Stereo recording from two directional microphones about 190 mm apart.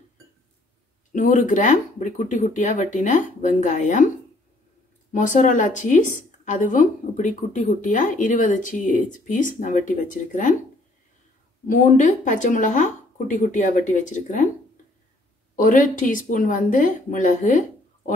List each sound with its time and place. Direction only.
1.1 s a woman's voice: 40° left (ahead or behind)
5.1 s a woman's voice: 40° left (ahead or behind)
11.6 s speech: 40° left (ahead or behind)
15.5 s speech: 45° left (ahead or behind)